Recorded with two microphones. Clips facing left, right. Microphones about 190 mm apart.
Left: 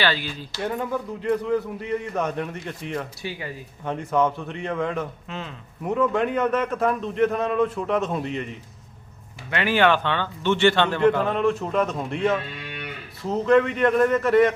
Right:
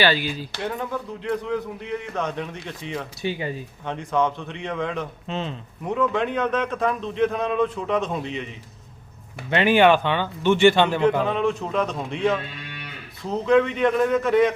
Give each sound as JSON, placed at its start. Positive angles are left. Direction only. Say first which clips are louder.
{"t": 0.0, "sound": "speech", "louder": "right 4 dB", "side_deg": -10}
{"t": 0.6, "sound": "a man's voice", "louder": "left 3 dB", "side_deg": 5}
{"t": 3.2, "sound": "speech", "louder": "right 6 dB", "side_deg": -25}
{"t": 3.8, "sound": "a man's voice", "louder": "left 1 dB", "side_deg": 5}
{"t": 5.3, "sound": "speech", "louder": "right 5 dB", "side_deg": -25}
{"t": 5.8, "sound": "a man's voice", "louder": "left 1 dB", "side_deg": 5}
{"t": 9.5, "sound": "speech", "louder": "right 4 dB", "side_deg": -20}
{"t": 11.3, "sound": "a man's voice", "louder": "left 1 dB", "side_deg": 0}